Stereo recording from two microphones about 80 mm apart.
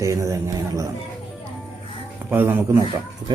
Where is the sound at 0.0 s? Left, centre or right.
Right.